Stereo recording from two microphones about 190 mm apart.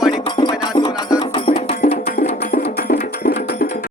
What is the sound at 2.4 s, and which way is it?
Music, 60° left (ahead or behind).